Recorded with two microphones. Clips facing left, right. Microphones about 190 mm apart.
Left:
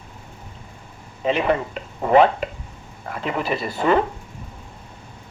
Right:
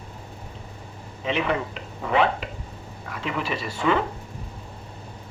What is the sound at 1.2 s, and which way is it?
Speech, 45° left (ahead or behind).